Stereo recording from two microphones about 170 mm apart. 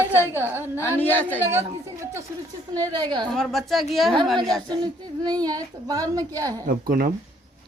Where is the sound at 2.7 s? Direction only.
25° right (ahead or behind).